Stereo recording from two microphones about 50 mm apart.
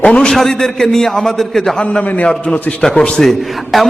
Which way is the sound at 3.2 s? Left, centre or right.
Centre.